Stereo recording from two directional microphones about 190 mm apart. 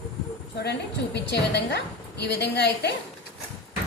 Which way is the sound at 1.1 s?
65° left (ahead or behind).